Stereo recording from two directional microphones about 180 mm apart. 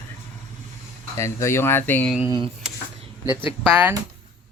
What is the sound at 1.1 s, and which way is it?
Speech, 15° left (ahead or behind).